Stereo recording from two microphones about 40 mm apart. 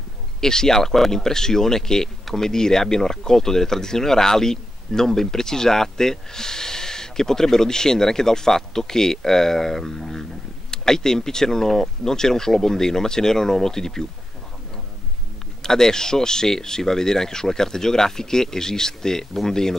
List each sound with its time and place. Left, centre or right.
0.4 s speech: centre
15.6 s speech: centre